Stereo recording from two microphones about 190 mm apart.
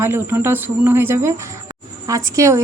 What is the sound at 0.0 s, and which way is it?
A woman's voice, 10° right (ahead or behind).